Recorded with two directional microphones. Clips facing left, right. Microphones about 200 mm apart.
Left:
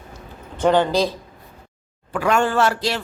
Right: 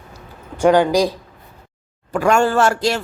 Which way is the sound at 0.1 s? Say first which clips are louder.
Right 2 dB; 10° right (ahead or behind).